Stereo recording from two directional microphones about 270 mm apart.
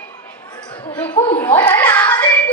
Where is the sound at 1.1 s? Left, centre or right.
Left.